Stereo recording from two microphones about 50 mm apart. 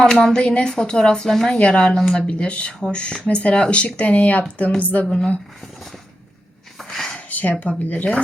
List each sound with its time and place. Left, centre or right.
0.0 s speech: centre
2.0 s speech: centre
2.2 s speech: left
5.0 s speech: centre
6.7 s a sound: centre
7.3 s a sound: left
7.9 s speech: left